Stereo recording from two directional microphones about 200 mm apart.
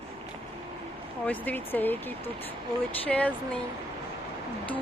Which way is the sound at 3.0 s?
5° left (ahead or behind).